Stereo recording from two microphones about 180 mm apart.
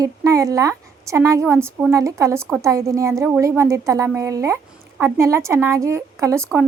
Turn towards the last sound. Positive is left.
turn(degrees=-5)  # may be behind; listen again after turning